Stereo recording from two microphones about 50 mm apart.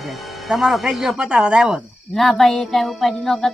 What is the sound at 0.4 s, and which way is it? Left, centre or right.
Speech, centre.